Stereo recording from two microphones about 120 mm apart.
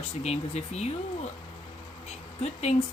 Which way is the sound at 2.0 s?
65° left (ahead or behind).